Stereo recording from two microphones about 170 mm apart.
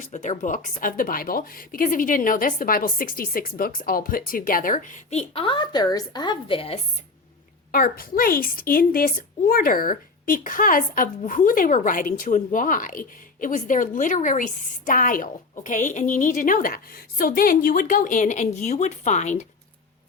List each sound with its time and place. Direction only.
0.0 s a woman's voice: 45° left (ahead or behind)
5.3 s a woman's voice: 30° left (ahead or behind)
7.7 s a woman's voice: 60° left (ahead or behind); by 19.5 s 40° left (ahead or behind)